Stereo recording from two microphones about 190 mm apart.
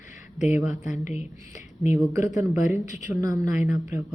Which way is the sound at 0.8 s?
40° left (ahead or behind).